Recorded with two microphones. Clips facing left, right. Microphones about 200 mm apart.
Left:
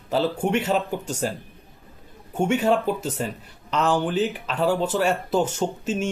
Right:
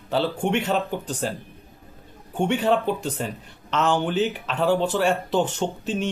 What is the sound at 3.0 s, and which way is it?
Speech, 40° left (ahead or behind).